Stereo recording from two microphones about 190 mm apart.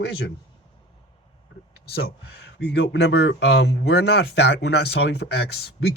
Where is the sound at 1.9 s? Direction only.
55° left (ahead or behind).